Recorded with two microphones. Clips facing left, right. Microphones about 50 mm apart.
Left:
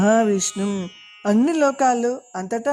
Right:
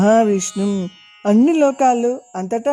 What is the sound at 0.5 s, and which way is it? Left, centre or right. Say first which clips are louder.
Speech: right 4 dB; left.